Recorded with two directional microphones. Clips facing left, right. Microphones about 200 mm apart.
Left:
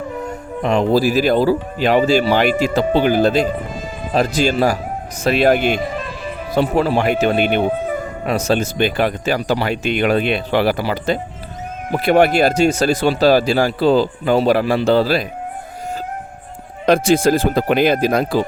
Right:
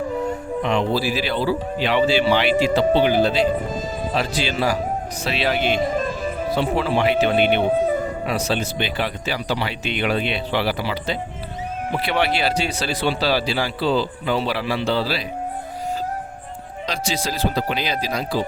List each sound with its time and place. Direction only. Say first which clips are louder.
0.6 s speech: left 7 dB; 45° left (ahead or behind)
16.8 s speech: left 13 dB; 55° left (ahead or behind)